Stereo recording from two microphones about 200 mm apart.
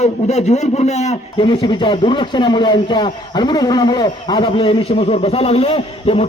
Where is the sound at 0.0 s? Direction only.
35° left (ahead or behind).